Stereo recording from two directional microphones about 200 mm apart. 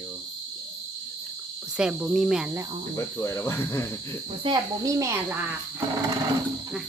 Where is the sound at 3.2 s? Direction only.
15° left (ahead or behind).